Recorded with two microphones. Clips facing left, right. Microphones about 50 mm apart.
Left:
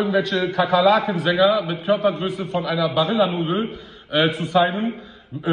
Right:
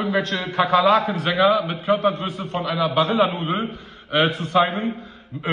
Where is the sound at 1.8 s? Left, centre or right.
Right.